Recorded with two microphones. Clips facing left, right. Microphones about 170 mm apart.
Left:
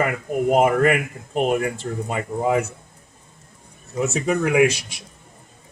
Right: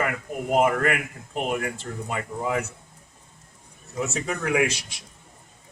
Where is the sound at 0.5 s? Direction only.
20° left (ahead or behind).